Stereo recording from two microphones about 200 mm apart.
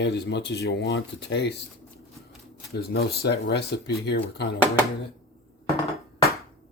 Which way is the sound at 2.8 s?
50° left (ahead or behind).